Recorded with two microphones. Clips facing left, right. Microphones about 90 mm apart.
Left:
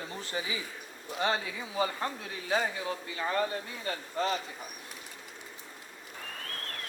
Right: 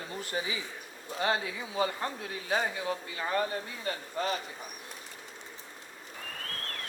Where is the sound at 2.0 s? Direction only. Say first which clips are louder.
Even; 30° right (ahead or behind).